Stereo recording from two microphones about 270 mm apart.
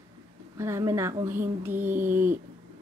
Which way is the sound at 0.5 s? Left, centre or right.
Centre.